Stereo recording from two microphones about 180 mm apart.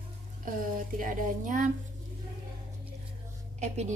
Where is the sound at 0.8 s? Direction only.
50° right (ahead or behind).